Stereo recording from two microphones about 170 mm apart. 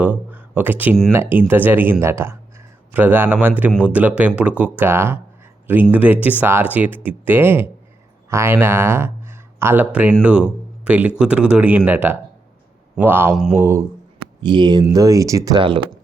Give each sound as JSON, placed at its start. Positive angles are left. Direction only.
{"t": 0.0, "sound": "speech", "side_deg": -10}
{"t": 14.4, "sound": "speech", "side_deg": -25}